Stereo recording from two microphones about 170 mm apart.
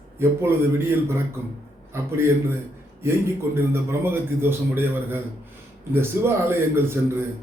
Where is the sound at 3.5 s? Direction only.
15° right (ahead or behind).